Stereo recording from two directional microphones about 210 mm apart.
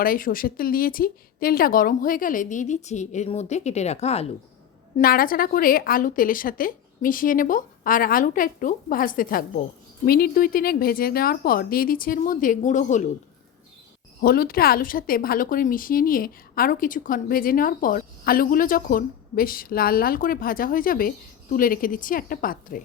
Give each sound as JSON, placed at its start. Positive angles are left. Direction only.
{"t": 0.0, "sound": "a woman's voice", "side_deg": 40}
{"t": 4.9, "sound": "a woman's voice", "side_deg": 45}
{"t": 14.2, "sound": "a woman's voice", "side_deg": 45}